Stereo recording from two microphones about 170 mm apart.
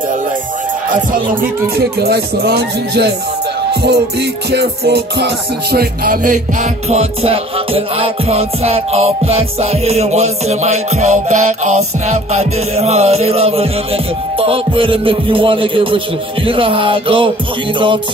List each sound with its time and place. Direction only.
1.4 s speech: 65° right (ahead or behind)
3.8 s music: 80° right; by 18.0 s 30° right (ahead or behind)